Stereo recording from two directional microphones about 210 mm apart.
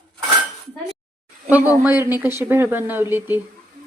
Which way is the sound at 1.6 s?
10° right (ahead or behind).